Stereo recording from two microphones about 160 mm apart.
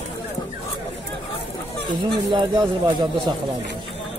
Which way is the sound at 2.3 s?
25° right (ahead or behind).